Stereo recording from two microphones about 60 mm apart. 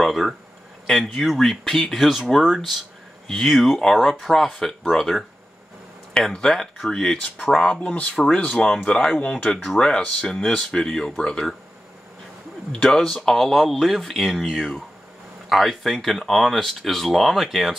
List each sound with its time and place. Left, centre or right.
0.0 s speech: centre
9.1 s speech: left
12.8 s speech: centre
15.5 s speech: centre